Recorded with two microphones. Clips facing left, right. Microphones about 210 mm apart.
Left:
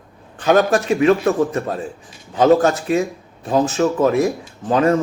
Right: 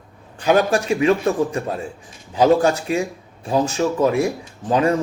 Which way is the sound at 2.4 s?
10° right (ahead or behind).